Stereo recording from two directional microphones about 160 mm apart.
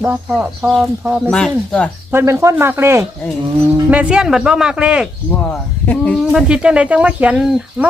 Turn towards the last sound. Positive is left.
turn(degrees=-5)  # may be behind; listen again after turning